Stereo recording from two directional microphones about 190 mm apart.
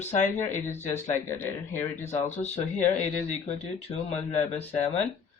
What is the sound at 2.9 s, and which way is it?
Speech, 35° left (ahead or behind).